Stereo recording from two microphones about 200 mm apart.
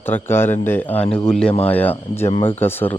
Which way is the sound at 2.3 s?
25° left (ahead or behind).